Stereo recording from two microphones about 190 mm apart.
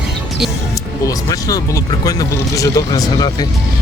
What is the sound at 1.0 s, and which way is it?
Speech, 20° left (ahead or behind).